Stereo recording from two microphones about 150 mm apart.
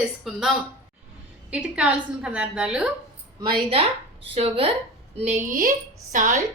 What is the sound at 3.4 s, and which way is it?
A woman's voice, 35° right (ahead or behind).